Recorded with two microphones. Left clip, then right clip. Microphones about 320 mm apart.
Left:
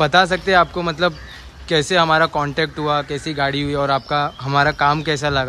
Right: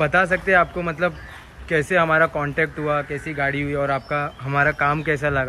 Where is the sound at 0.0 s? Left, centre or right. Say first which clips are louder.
Left 4 dB; centre.